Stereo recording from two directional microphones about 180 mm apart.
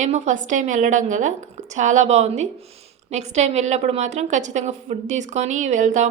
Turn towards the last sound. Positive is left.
turn(degrees=-45)  # may be behind; listen again after turning